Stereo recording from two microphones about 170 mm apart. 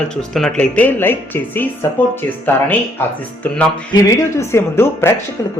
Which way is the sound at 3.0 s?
15° left (ahead or behind).